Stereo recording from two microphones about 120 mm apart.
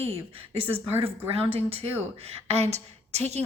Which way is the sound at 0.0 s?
55° right (ahead or behind).